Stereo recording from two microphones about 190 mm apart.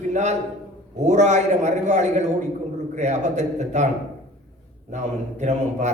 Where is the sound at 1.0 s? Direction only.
40° right (ahead or behind).